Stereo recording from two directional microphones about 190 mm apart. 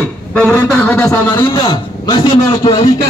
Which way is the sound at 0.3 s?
5° left (ahead or behind).